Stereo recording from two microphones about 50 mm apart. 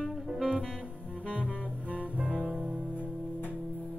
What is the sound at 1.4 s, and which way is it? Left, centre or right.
Music, left.